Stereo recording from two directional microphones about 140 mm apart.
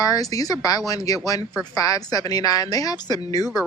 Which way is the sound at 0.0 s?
25° left (ahead or behind).